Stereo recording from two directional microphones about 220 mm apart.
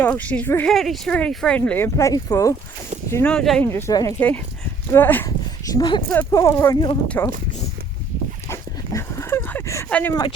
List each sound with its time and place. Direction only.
0.0 s speech: 5° left (ahead or behind)
5.7 s speech: 20° left (ahead or behind)
8.4 s dog: 15° left (ahead or behind)